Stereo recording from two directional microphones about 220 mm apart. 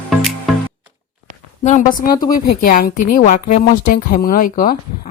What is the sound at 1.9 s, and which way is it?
A woman's voice, 40° left (ahead or behind).